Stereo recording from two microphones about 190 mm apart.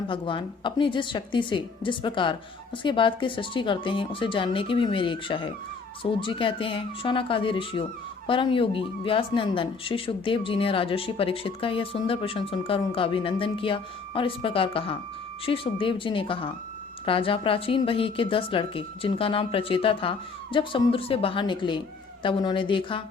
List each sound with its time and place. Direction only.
0.1 s speech: 25° left (ahead or behind)